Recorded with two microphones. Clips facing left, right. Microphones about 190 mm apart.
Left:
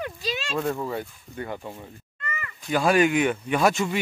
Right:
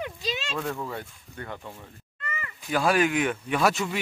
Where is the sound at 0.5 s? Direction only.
20° left (ahead or behind).